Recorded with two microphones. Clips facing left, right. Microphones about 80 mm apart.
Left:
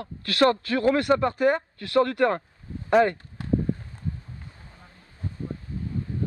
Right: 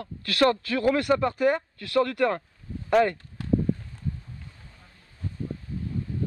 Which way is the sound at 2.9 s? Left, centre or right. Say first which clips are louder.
Left 2 dB; centre.